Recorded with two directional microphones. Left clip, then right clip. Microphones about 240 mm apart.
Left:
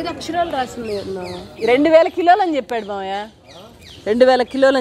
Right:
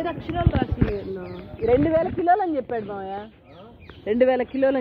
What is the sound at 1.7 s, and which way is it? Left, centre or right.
Speech, left.